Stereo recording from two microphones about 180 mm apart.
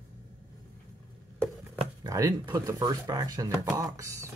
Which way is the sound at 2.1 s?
20° right (ahead or behind).